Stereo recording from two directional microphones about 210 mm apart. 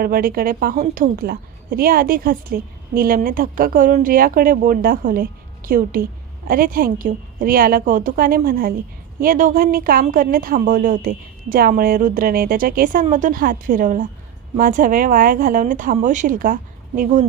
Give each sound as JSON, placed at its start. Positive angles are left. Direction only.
{"t": 0.0, "sound": "a woman's voice", "side_deg": -45}